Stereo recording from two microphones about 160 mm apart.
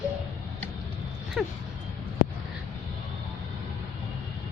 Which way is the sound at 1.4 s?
5° right (ahead or behind).